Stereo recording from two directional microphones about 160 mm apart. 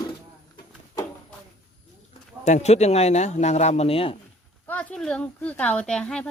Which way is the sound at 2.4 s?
45° left (ahead or behind).